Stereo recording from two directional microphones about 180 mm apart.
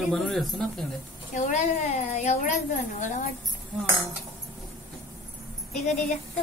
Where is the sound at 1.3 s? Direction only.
45° left (ahead or behind).